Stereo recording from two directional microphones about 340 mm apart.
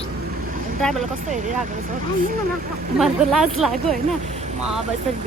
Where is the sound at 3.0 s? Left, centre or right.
Centre.